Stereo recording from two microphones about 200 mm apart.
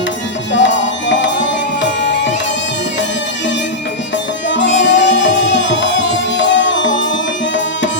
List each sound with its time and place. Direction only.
0.5 s music: 65° left (ahead or behind)
4.4 s music: 65° left (ahead or behind)